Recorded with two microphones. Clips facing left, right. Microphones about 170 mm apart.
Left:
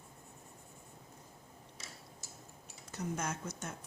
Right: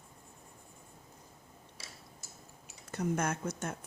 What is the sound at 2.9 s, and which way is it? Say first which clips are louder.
Speech: right 6 dB; 55° right (ahead or behind).